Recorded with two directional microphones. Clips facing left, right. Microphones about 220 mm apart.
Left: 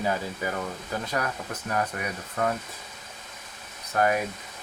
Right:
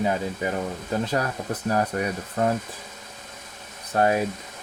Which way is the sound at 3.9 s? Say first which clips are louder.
Right 3 dB; 30° right (ahead or behind).